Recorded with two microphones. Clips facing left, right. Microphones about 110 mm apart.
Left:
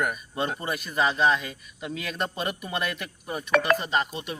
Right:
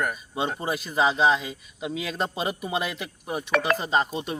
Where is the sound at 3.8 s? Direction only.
30° right (ahead or behind).